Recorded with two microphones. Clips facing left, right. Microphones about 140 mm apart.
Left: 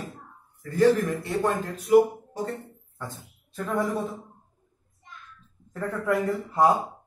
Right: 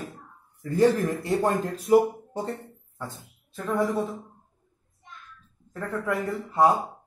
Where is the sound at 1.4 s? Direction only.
30° right (ahead or behind).